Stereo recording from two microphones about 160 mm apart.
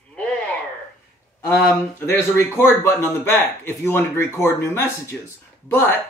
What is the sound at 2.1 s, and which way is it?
A man's voice, 15° left (ahead or behind).